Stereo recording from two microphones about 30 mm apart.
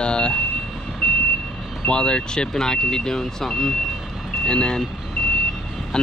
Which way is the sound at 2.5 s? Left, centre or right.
Centre.